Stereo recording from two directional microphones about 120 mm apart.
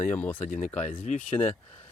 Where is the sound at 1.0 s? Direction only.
80° left.